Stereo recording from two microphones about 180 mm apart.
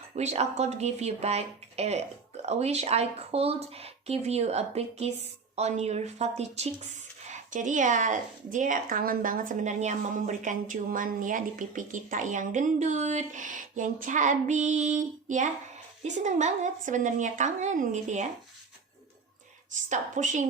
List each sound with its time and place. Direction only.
0.2 s a woman's voice: 40° right (ahead or behind)
19.7 s a woman's voice: 45° right (ahead or behind)